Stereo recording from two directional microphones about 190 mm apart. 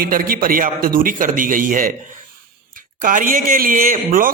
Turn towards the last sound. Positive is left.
turn(degrees=-45)  # may be behind; listen again after turning